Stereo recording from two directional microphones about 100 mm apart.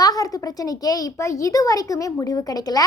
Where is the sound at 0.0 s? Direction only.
40° left (ahead or behind).